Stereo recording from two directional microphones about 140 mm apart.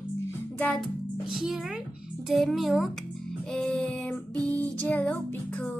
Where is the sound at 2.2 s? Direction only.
Centre (ahead or behind).